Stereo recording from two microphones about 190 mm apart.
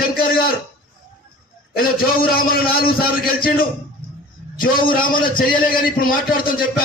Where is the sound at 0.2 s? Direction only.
50° left (ahead or behind).